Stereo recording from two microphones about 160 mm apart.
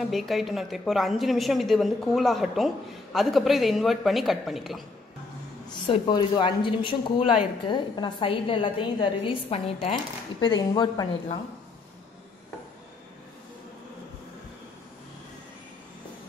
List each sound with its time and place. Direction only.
0.1 s a woman's voice: centre (ahead or behind)
5.7 s a woman's voice: 30° left (ahead or behind)
10.4 s speech: 25° left (ahead or behind)